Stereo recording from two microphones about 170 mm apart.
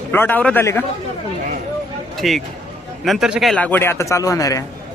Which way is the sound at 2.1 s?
Centre (ahead or behind).